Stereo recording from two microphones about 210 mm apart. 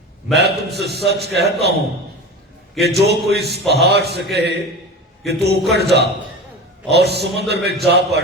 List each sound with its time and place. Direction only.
0.3 s a man's voice: 50° right (ahead or behind)
2.8 s a man's voice: 50° right (ahead or behind)